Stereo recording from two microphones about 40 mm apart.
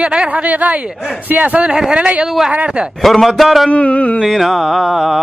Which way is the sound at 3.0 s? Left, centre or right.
Centre.